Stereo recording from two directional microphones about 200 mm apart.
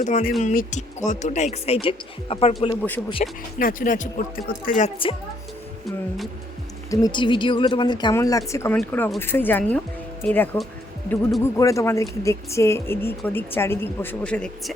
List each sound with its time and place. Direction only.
0.0 s speech: 40° left (ahead or behind)
2.6 s a woman's voice: 10° left (ahead or behind)
3.6 s speech: 45° left (ahead or behind)
6.9 s a woman's voice: 20° left (ahead or behind); by 14.5 s 5° left (ahead or behind)